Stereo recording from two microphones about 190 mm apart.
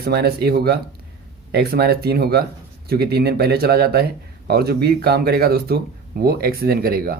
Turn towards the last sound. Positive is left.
turn(degrees=-50)  # may be behind; listen again after turning